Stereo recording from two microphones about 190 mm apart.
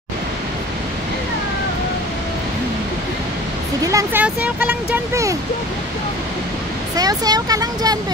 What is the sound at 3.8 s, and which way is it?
Speech, 15° right (ahead or behind).